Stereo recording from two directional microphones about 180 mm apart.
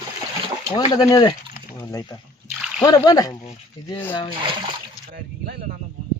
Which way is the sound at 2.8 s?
20° left (ahead or behind).